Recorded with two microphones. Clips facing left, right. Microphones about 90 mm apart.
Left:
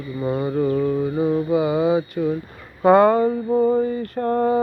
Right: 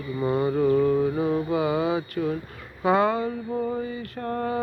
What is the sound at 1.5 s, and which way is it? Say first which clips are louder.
Mantra: left 5 dB; 20° left (ahead or behind).